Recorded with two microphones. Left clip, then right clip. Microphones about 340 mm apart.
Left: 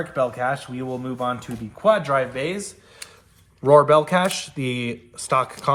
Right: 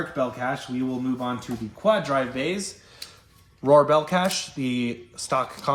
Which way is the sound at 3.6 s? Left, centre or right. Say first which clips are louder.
Left 3 dB; left.